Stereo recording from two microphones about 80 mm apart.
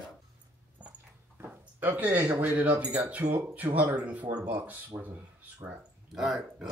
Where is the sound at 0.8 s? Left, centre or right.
Centre.